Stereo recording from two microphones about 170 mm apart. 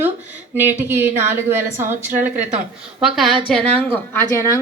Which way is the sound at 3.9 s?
10° left (ahead or behind).